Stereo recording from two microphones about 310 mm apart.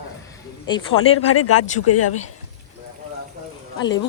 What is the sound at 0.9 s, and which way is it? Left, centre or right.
Speech, left.